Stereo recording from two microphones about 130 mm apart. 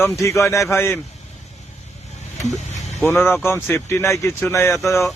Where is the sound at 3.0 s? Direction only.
15° left (ahead or behind).